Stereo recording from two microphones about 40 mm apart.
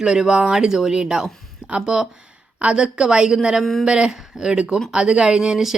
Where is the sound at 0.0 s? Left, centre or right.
Centre.